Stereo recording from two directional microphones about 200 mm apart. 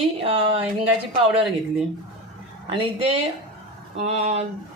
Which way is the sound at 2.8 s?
30° right (ahead or behind).